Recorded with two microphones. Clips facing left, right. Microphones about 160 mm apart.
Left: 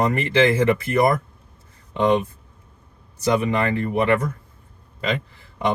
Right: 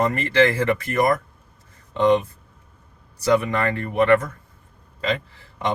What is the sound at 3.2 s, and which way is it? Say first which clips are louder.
Speech: even; 20° left (ahead or behind).